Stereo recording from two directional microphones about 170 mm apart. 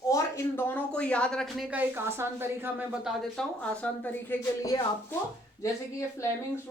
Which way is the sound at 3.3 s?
5° left (ahead or behind).